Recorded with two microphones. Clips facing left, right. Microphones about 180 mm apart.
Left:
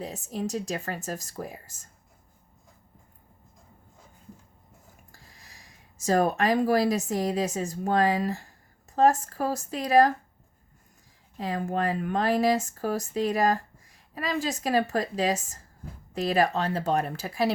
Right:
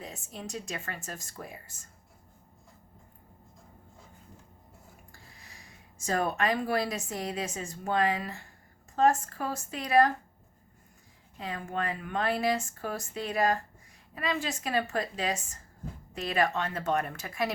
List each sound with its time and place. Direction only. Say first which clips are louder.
0.0 s a woman's voice: left 9 dB; 40° left (ahead or behind)
5.5 s a woman's voice: right 1 dB; 35° left (ahead or behind)
11.3 s a woman's voice: left 6 dB; 40° left (ahead or behind)